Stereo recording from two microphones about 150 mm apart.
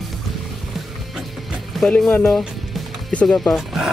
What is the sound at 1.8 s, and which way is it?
Speech, 5° left (ahead or behind).